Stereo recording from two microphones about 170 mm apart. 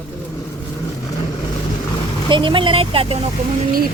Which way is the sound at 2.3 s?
30° right (ahead or behind).